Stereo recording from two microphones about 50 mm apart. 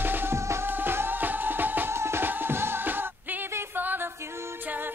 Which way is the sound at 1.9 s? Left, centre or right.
Right.